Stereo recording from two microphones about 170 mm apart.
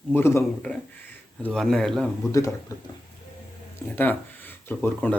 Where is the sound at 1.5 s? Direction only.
5° left (ahead or behind).